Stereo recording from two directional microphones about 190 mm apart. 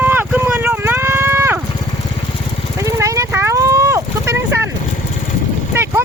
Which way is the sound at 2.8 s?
15° right (ahead or behind).